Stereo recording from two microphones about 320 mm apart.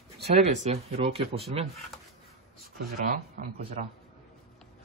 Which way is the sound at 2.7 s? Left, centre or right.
Right.